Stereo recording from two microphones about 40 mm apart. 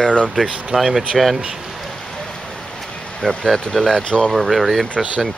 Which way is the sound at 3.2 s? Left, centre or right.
Centre.